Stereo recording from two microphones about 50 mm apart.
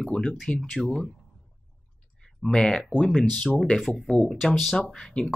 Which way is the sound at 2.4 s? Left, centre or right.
Centre.